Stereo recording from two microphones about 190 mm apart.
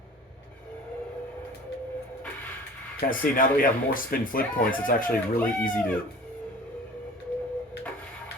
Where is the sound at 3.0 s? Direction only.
45° left (ahead or behind).